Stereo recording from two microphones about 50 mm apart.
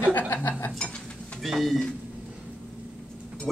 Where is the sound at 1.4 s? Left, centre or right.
Centre.